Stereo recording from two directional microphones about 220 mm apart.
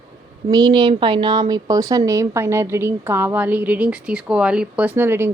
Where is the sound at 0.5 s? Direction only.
20° right (ahead or behind).